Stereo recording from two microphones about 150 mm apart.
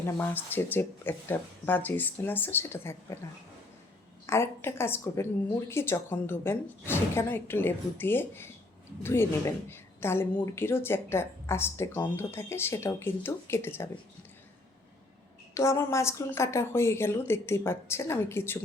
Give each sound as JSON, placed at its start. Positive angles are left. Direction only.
{"t": 0.0, "sound": "a woman's voice", "side_deg": 15}
{"t": 4.3, "sound": "a woman's voice", "side_deg": 15}
{"t": 15.5, "sound": "a woman's voice", "side_deg": 20}